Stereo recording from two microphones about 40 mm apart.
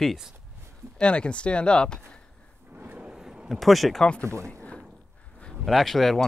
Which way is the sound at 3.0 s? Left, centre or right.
Centre.